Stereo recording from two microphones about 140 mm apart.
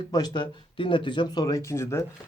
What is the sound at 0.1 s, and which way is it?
Speech, 30° left (ahead or behind).